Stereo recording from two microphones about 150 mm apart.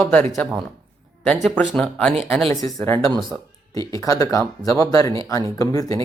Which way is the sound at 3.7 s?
20° left (ahead or behind).